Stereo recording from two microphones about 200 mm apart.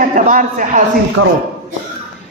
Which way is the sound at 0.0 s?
40° right (ahead or behind).